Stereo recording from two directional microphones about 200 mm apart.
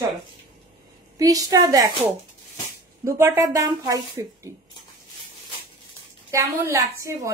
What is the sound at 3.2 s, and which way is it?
Speech, 15° right (ahead or behind).